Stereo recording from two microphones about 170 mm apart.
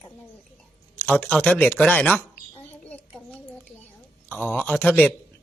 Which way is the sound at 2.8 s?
5° left (ahead or behind).